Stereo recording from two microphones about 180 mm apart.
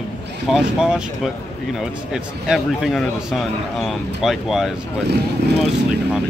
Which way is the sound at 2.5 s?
Centre (ahead or behind).